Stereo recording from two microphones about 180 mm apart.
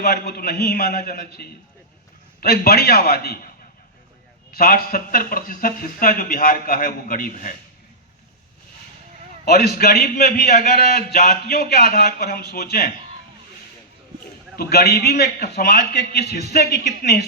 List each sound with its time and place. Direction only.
0.0 s a man's voice: 60° left (ahead or behind)
4.5 s speech: 55° left (ahead or behind)
9.5 s a man's voice: 65° left (ahead or behind)
10.4 s speech: 40° left (ahead or behind)
10.8 s a man's voice: 60° left (ahead or behind)
14.5 s a man's voice: 60° left (ahead or behind)